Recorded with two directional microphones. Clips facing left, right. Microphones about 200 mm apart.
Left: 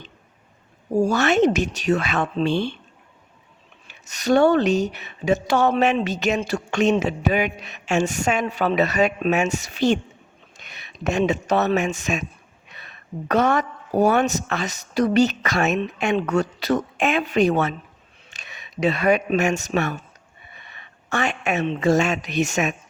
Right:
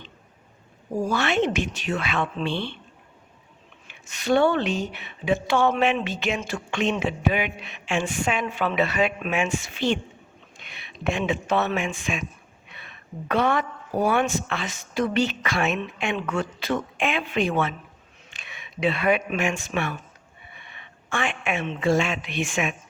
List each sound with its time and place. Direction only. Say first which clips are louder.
1.1 s speech: left 4 dB; 40° left (ahead or behind)
3.8 s a woman's voice: left 3 dB; 40° left (ahead or behind)